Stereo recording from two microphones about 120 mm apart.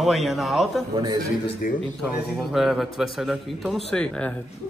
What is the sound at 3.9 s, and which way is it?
Speech, 5° left (ahead or behind).